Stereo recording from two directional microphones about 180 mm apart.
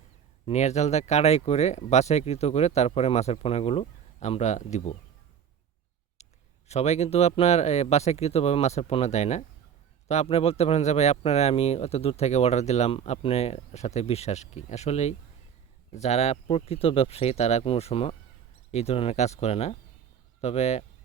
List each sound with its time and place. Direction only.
0.4 s speech: 40° left (ahead or behind)
6.2 s a sound: 40° left (ahead or behind)
6.7 s speech: 35° left (ahead or behind)